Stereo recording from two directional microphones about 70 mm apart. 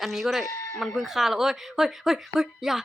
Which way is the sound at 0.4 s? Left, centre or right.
Left.